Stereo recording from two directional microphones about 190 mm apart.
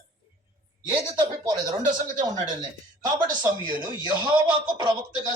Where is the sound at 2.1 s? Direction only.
20° right (ahead or behind).